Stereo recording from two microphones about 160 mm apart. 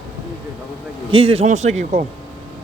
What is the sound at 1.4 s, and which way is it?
Speech, 45° right (ahead or behind).